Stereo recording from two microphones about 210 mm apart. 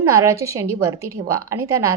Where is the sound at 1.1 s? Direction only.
90° right.